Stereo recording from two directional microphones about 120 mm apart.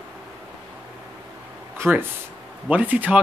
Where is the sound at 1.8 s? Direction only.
20° right (ahead or behind).